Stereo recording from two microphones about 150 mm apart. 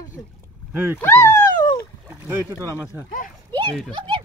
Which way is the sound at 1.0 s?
15° left (ahead or behind).